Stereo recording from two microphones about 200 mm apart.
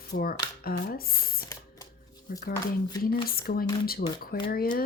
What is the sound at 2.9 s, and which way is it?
Speech, 20° left (ahead or behind).